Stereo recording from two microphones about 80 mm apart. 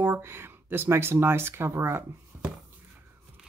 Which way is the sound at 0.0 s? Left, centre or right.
Right.